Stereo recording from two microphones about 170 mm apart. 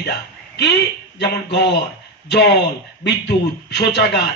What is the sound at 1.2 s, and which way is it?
A man's voice, 80° left.